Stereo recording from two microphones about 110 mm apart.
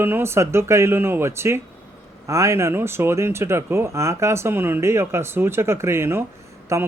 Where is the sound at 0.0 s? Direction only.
20° right (ahead or behind).